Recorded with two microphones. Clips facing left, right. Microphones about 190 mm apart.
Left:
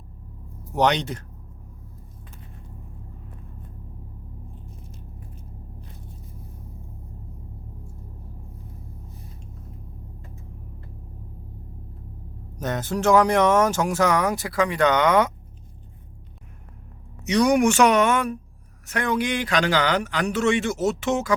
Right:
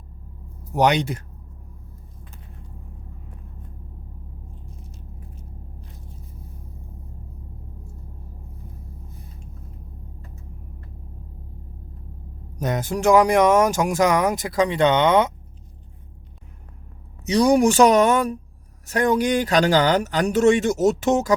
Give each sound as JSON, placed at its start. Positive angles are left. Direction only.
{"t": 0.7, "sound": "speech", "side_deg": -10}
{"t": 12.5, "sound": "speech", "side_deg": -10}
{"t": 17.2, "sound": "a man's voice", "side_deg": -35}